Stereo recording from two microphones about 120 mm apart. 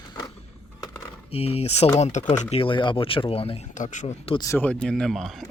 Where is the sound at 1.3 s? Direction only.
55° left (ahead or behind).